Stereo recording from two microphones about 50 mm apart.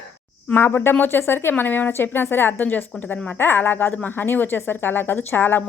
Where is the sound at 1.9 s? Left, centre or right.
Left.